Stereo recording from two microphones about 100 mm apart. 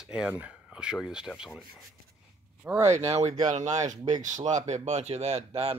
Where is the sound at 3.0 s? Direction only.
90° right.